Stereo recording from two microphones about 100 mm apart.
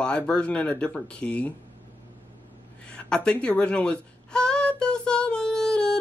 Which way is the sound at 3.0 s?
10° left (ahead or behind).